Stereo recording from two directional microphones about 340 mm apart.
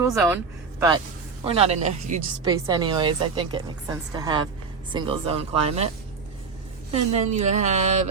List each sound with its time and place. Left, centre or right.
0.0 s speech: centre
1.5 s a woman's voice: centre
6.9 s speech: centre